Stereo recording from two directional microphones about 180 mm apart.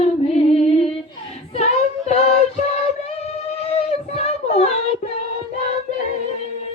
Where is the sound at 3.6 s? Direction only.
35° left (ahead or behind).